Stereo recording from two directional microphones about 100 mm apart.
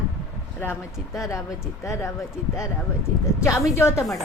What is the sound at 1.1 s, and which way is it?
Speech, 35° left (ahead or behind).